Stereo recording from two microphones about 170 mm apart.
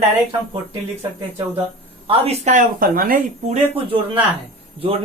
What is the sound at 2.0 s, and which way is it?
Speech, 35° right (ahead or behind).